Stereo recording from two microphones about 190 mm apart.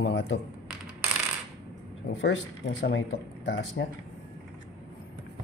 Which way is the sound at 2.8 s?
65° left (ahead or behind).